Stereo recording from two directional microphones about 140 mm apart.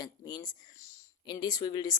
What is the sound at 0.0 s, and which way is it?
Speech, 30° left (ahead or behind).